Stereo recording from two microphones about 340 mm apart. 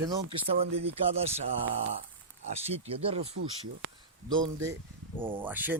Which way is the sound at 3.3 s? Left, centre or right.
Right.